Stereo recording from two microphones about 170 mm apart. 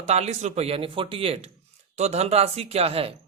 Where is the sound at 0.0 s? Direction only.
40° right (ahead or behind).